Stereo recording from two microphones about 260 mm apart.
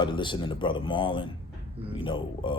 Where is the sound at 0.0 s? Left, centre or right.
Centre.